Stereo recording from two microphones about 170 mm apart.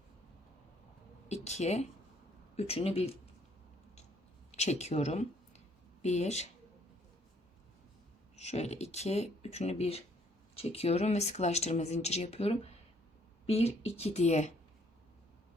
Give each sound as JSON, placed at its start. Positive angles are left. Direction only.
{"t": 1.3, "sound": "speech", "side_deg": 40}
{"t": 4.5, "sound": "speech", "side_deg": 40}
{"t": 8.4, "sound": "speech", "side_deg": 40}